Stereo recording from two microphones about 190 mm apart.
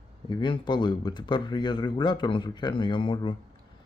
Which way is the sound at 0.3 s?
25° left (ahead or behind).